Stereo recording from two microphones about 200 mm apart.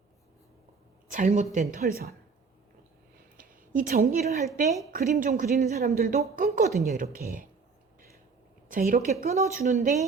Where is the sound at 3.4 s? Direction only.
45° right (ahead or behind).